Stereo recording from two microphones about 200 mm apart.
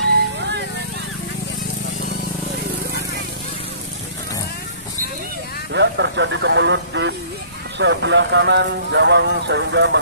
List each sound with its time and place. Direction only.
5.7 s speech: 60° right (ahead or behind)